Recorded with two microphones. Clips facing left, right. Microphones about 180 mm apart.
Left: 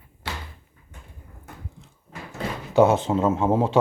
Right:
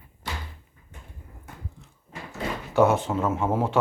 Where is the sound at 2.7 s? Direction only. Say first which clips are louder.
Left 3 dB; 20° left (ahead or behind).